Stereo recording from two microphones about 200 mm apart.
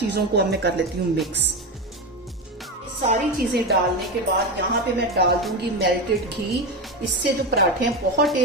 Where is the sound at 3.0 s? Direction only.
50° right (ahead or behind).